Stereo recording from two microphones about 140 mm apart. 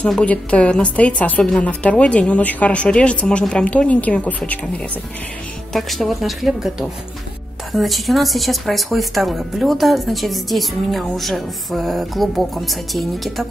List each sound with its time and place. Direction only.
0.0 s a woman's voice: 10° left (ahead or behind)
5.7 s speech: centre (ahead or behind)